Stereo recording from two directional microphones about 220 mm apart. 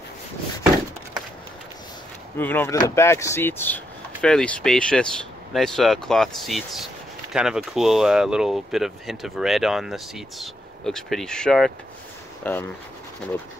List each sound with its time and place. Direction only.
2.3 s speech: 10° left (ahead or behind)